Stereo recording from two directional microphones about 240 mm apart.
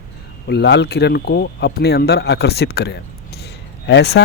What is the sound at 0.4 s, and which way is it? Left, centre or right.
Speech, left.